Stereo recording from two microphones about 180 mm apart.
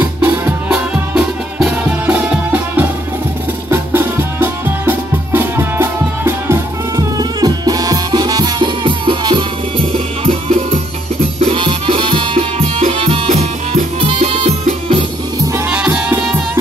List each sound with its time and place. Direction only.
0.2 s music: 5° right (ahead or behind); by 15.0 s 35° right (ahead or behind)
15.7 s music: 5° right (ahead or behind)